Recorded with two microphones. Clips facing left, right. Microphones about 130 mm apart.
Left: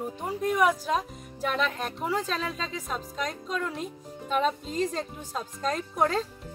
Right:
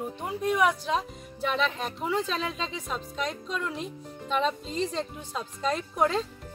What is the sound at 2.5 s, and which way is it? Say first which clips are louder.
Speech: right 1 dB; 40° left (ahead or behind).